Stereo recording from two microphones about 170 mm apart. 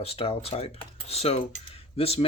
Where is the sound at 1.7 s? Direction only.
35° left (ahead or behind).